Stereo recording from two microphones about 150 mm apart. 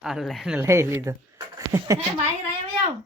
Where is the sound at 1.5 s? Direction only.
20° right (ahead or behind).